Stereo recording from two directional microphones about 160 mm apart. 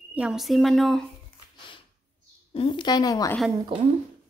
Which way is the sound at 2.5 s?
30° left (ahead or behind).